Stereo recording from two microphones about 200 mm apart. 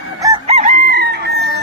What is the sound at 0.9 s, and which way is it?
Chicken, 55° right (ahead or behind).